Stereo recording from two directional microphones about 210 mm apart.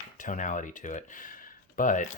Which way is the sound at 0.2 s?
35° left (ahead or behind).